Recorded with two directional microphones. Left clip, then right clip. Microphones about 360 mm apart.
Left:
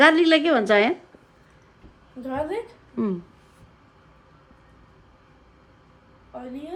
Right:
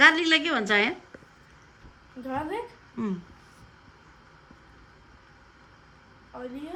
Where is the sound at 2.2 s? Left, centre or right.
Centre.